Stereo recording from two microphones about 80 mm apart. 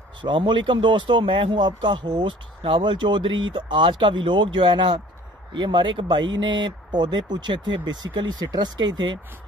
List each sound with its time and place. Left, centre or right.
0.2 s a man's voice: right
4.0 s speech: right